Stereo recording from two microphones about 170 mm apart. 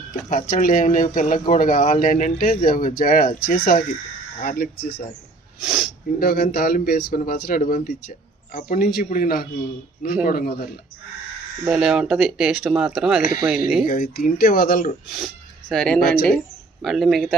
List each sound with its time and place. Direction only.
0.1 s speech: 55° left (ahead or behind); by 5.0 s 70° left (ahead or behind)
5.5 s a sound: centre (ahead or behind)
6.1 s speech: 55° left (ahead or behind)
11.6 s speech: 5° right (ahead or behind)
13.8 s speech: 55° left (ahead or behind)
15.7 s speech: 5° left (ahead or behind)